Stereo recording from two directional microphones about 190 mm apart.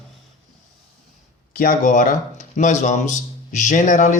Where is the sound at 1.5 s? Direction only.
50° left (ahead or behind).